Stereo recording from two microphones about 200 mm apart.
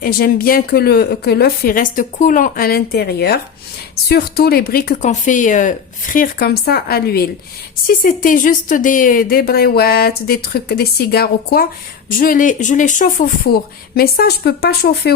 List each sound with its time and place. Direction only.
0.0 s speech: 45° left (ahead or behind)